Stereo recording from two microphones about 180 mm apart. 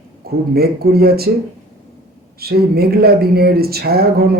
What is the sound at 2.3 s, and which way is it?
Speech, 60° right (ahead or behind).